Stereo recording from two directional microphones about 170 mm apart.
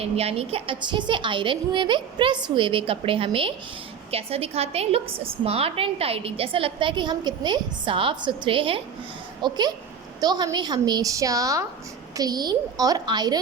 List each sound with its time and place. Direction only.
0.0 s a woman's voice: 35° right (ahead or behind)